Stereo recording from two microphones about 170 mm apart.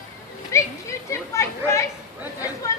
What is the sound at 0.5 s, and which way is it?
Speech, 15° left (ahead or behind).